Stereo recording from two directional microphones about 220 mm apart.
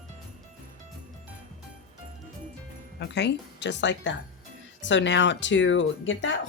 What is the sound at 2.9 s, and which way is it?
Speech, 50° left (ahead or behind).